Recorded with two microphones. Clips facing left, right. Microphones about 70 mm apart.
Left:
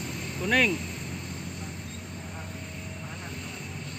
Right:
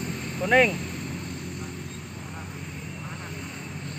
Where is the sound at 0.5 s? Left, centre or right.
Centre.